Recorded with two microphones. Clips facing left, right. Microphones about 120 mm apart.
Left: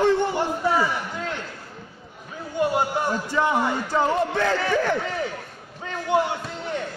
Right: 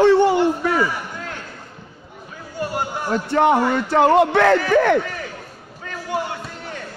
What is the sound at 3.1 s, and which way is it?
Speech, 65° right (ahead or behind).